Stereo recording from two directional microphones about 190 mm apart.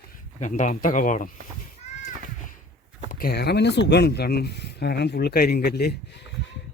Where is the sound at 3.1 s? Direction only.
50° left (ahead or behind).